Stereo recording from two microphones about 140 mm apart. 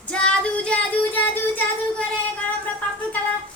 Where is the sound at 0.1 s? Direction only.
10° left (ahead or behind).